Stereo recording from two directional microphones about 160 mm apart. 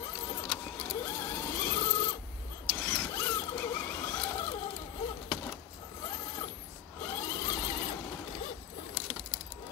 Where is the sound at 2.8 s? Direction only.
5° left (ahead or behind).